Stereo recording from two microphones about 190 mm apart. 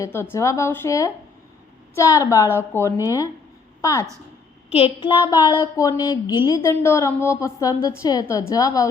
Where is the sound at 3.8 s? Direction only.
15° left (ahead or behind).